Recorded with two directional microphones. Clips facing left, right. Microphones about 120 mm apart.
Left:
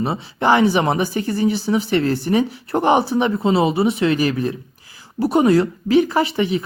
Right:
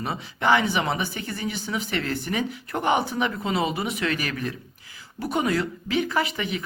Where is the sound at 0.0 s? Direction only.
30° left (ahead or behind).